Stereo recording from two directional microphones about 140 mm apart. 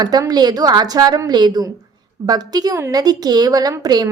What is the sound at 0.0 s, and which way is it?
A woman's voice, 30° right (ahead or behind).